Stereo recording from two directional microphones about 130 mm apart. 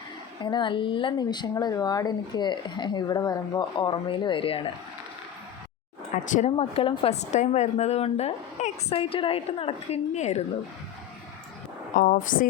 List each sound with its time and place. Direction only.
0.4 s speech: 35° left (ahead or behind)
6.2 s speech: 75° left (ahead or behind)
6.6 s a woman's voice: 45° left (ahead or behind)
7.1 s a woman's voice: 60° left (ahead or behind)
11.9 s speech: 90° left